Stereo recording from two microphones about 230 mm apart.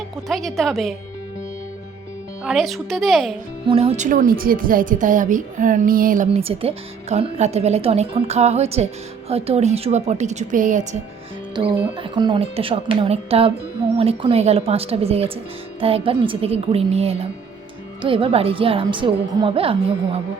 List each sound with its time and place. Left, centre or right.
0.3 s speech: centre
2.4 s speech: centre
3.7 s a woman's voice: right
11.5 s a woman's voice: centre